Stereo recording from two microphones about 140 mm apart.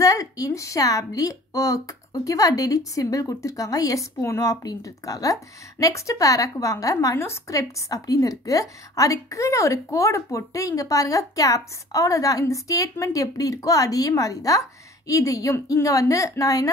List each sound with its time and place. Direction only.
0.0 s a woman's voice: 25° left (ahead or behind)